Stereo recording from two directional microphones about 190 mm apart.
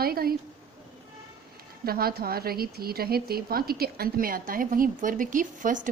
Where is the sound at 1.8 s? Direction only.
55° right (ahead or behind).